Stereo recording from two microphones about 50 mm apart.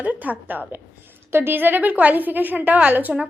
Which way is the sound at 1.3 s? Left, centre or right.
Right.